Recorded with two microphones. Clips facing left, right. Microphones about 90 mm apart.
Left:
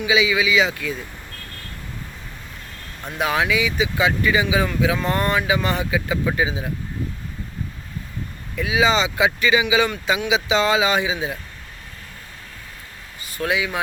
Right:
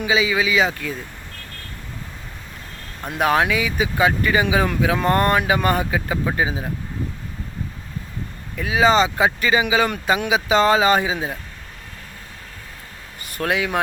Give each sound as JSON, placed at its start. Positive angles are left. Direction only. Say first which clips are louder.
{"t": 0.0, "sound": "speech", "louder": "even", "side_deg": -40}
{"t": 3.2, "sound": "speech", "louder": "right 2 dB", "side_deg": -45}
{"t": 8.5, "sound": "speech", "louder": "right 3 dB", "side_deg": -40}
{"t": 13.3, "sound": "speech", "louder": "right 2 dB", "side_deg": -50}